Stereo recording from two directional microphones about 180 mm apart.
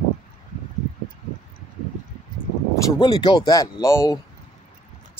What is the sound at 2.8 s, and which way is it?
Speech, 20° left (ahead or behind).